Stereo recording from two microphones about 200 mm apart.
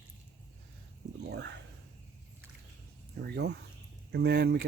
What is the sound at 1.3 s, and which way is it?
Speech, 60° right (ahead or behind).